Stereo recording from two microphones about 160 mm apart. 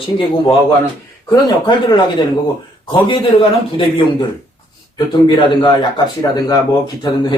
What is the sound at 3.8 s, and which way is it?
Speech, 30° left (ahead or behind).